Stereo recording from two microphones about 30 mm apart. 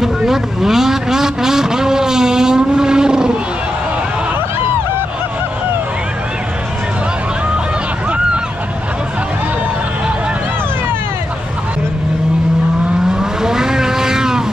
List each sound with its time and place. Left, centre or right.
0.0 s speech: centre
13.2 s vehicle: centre